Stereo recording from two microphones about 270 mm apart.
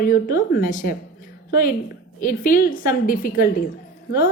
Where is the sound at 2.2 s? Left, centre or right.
Left.